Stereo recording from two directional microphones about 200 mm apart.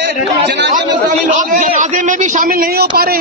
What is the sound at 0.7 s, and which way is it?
A man's voice, 40° right (ahead or behind).